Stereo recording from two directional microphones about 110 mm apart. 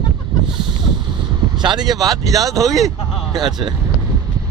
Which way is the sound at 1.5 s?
40° right (ahead or behind).